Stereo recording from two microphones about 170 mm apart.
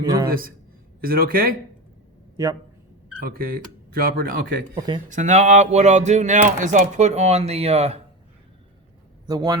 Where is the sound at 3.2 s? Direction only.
60° right (ahead or behind).